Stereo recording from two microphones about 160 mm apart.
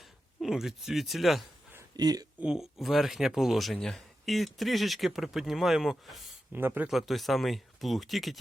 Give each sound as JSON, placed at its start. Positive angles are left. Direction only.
{"t": 0.4, "sound": "speech", "side_deg": -5}
{"t": 2.0, "sound": "speech", "side_deg": -25}
{"t": 2.4, "sound": "speech", "side_deg": -5}
{"t": 6.5, "sound": "speech", "side_deg": -10}